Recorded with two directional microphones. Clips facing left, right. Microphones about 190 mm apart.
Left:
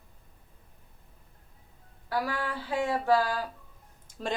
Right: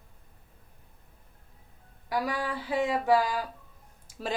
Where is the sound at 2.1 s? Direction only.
15° right (ahead or behind).